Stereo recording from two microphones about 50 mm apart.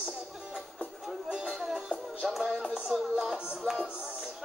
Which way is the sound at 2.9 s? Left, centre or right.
Centre.